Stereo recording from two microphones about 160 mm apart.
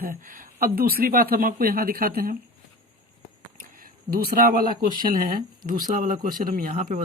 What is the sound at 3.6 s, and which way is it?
Speech, 60° right (ahead or behind).